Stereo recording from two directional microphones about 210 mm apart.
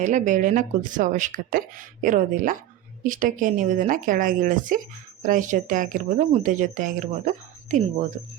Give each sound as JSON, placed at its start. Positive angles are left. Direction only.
{"t": 0.0, "sound": "speech", "side_deg": -35}